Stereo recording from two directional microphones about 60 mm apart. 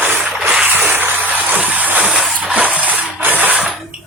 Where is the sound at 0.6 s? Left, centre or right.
Right.